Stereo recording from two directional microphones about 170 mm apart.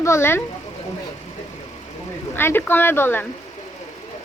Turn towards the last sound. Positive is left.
turn(degrees=10)  # may be behind; listen again after turning